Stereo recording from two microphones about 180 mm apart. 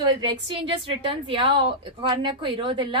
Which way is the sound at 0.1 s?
25° right (ahead or behind).